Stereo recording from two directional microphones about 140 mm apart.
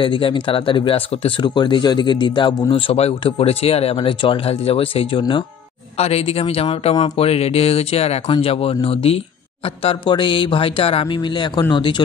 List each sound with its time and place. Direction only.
0.0 s speech: 35° left (ahead or behind)